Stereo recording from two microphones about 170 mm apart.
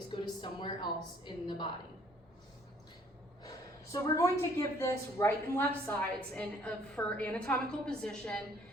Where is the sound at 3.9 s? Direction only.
20° left (ahead or behind).